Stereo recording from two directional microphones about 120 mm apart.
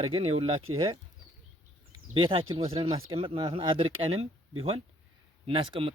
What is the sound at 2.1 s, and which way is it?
Speech, 45° right (ahead or behind).